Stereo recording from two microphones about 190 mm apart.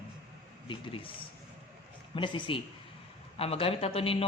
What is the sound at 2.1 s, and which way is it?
A man's voice, 25° left (ahead or behind).